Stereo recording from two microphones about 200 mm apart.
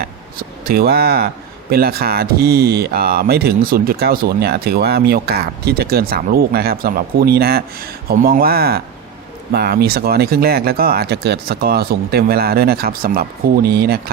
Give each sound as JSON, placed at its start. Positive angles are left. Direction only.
{"t": 0.0, "sound": "speech", "side_deg": -50}